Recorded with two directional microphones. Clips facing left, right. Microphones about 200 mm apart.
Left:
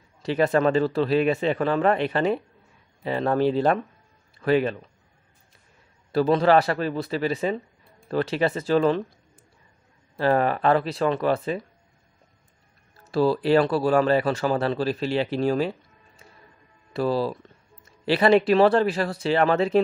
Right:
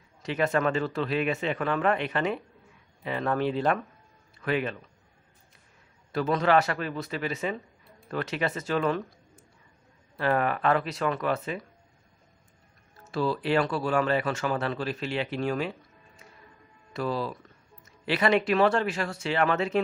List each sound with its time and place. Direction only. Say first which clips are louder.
0.2 s speech: left 5 dB; 35° left (ahead or behind)
6.1 s speech: left 5 dB; 30° left (ahead or behind)
10.1 s speech: left 5 dB; 30° left (ahead or behind)
13.1 s speech: left 6 dB; 35° left (ahead or behind)
16.9 s speech: left 6 dB; 35° left (ahead or behind)